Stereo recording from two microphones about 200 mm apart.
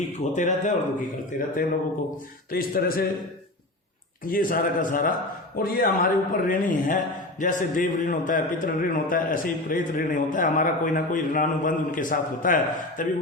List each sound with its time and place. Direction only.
0.3 s a man's voice: 40° left (ahead or behind)
4.3 s a man's voice: 45° left (ahead or behind)